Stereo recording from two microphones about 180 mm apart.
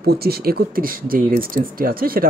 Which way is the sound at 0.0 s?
60° right (ahead or behind).